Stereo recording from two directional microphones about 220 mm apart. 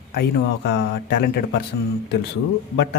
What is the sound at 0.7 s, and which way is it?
Speech, 50° left (ahead or behind).